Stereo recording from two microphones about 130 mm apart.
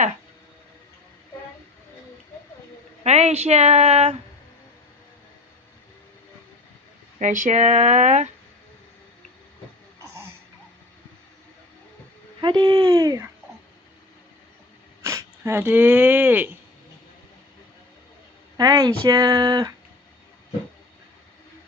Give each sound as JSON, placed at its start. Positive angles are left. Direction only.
{"t": 3.0, "sound": "speech", "side_deg": -60}
{"t": 7.2, "sound": "speech", "side_deg": -80}
{"t": 12.4, "sound": "speech", "side_deg": -35}
{"t": 15.0, "sound": "speech", "side_deg": -20}
{"t": 18.5, "sound": "speech", "side_deg": -30}